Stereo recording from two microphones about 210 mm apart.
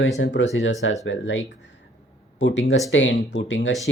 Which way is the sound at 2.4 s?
60° left (ahead or behind).